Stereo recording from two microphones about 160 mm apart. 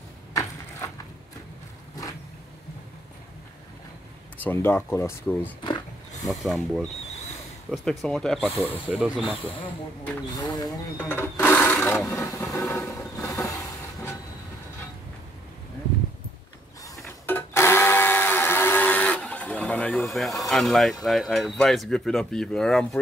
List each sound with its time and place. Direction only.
0.3 s a sound: 20° left (ahead or behind)
4.4 s speech: 15° left (ahead or behind)
6.2 s speech: centre (ahead or behind)
9.4 s speech: 35° left (ahead or behind)
11.0 s sewing machine: 15° left (ahead or behind)
12.1 s speech: 15° left (ahead or behind)
12.9 s train: 20° left (ahead or behind)
17.3 s blender: 15° left (ahead or behind)
21.0 s speech: centre (ahead or behind)